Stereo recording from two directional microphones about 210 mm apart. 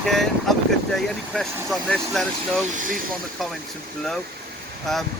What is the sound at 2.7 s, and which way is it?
Speech, 40° right (ahead or behind).